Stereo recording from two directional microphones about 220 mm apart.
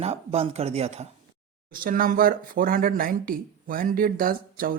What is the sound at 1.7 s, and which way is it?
Speech, 40° right (ahead or behind).